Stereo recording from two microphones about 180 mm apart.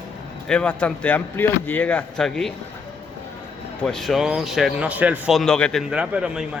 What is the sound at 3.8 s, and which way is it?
Speech, 5° left (ahead or behind).